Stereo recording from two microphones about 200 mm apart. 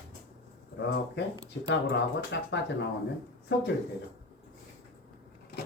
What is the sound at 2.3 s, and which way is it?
Speech, 60° left (ahead or behind).